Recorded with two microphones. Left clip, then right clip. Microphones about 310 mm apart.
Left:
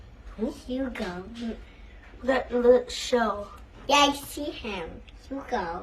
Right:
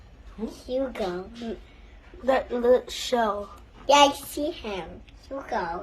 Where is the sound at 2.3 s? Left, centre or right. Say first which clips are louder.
Left 2 dB; right.